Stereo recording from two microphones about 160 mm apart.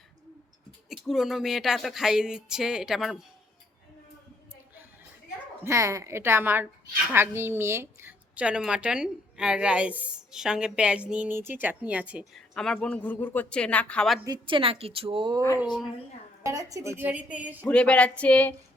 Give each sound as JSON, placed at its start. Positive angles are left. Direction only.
{"t": 0.9, "sound": "a sound", "side_deg": 0}
{"t": 5.6, "sound": "a woman's voice", "side_deg": -20}
{"t": 12.5, "sound": "speech", "side_deg": 5}
{"t": 14.3, "sound": "a woman's voice", "side_deg": -30}
{"t": 16.4, "sound": "a woman's voice", "side_deg": -20}
{"t": 17.7, "sound": "speech", "side_deg": 5}